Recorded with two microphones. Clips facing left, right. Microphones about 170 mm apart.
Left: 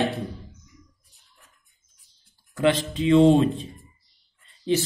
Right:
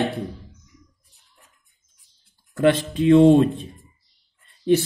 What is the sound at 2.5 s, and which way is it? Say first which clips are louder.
Speech: right 3 dB; 50° right (ahead or behind).